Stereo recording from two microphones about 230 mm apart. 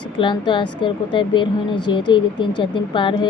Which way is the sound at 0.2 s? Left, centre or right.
Left.